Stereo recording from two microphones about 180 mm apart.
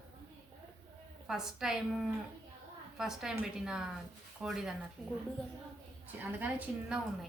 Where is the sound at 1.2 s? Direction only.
5° right (ahead or behind).